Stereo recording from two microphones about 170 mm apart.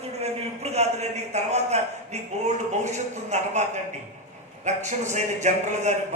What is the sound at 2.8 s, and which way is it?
A man's voice, 45° right (ahead or behind).